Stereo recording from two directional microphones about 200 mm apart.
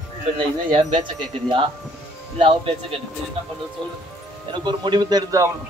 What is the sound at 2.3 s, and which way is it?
Speech, 25° right (ahead or behind).